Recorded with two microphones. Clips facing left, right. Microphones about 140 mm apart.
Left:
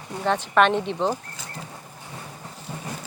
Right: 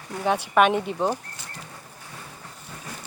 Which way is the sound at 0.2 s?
10° right (ahead or behind).